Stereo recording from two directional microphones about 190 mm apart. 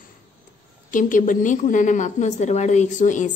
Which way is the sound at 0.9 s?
45° left (ahead or behind).